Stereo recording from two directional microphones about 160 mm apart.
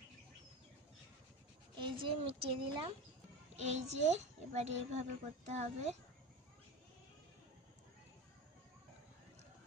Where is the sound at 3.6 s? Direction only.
45° right (ahead or behind).